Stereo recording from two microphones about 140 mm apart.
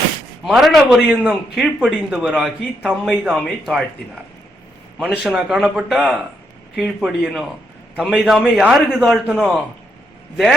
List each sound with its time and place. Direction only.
0.4 s a man's voice: centre (ahead or behind)
4.9 s a man's voice: 5° right (ahead or behind)